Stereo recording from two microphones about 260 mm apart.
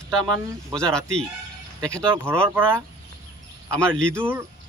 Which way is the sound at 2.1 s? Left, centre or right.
Centre.